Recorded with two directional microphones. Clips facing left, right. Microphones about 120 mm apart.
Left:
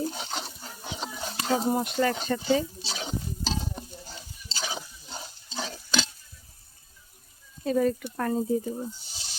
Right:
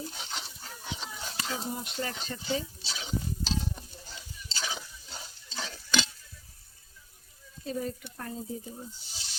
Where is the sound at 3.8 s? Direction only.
25° left (ahead or behind).